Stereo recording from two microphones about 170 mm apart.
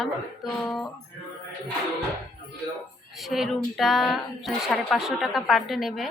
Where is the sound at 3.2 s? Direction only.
Centre (ahead or behind).